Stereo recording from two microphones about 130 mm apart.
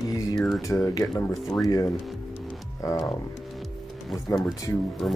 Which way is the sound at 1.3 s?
Centre (ahead or behind).